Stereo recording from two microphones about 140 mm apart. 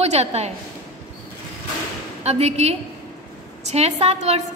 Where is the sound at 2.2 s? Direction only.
50° right (ahead or behind).